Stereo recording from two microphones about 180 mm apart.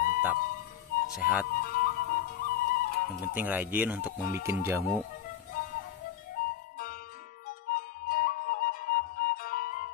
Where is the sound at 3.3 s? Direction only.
10° right (ahead or behind).